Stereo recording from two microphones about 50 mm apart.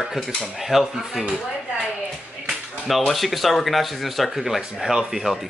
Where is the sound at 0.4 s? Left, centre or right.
Centre.